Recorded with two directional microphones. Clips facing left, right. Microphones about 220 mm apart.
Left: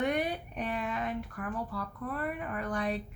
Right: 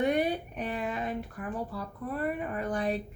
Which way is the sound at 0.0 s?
25° right (ahead or behind).